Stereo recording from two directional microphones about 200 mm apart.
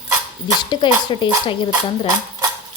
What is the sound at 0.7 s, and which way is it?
Speech, 25° left (ahead or behind).